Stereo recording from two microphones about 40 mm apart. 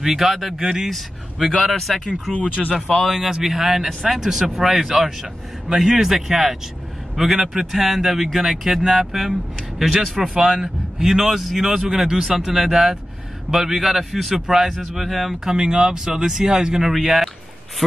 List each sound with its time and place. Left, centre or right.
0.0 s speech: centre
0.8 s speech: centre
2.3 s speech: left
3.1 s speech: centre
14.8 s speech: centre
15.4 s speech: centre
16.9 s speech: centre